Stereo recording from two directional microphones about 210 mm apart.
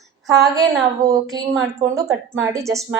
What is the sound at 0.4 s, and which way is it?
Speech, 15° right (ahead or behind).